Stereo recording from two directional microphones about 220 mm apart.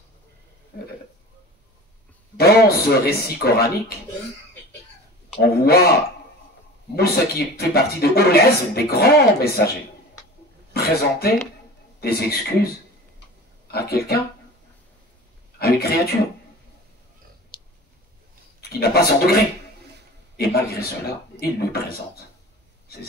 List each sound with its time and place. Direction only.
2.3 s a man's voice: 45° left (ahead or behind)
5.4 s a man's voice: 45° left (ahead or behind)
7.0 s a man's voice: 45° left (ahead or behind)
10.7 s a man's voice: 45° left (ahead or behind)
15.6 s a man's voice: 45° left (ahead or behind)
17.5 s a sound: 20° left (ahead or behind)
18.6 s a man's voice: 45° left (ahead or behind)